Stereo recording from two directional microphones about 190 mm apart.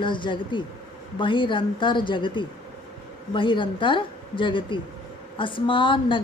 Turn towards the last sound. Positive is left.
turn(degrees=25)  # may be behind; listen again after turning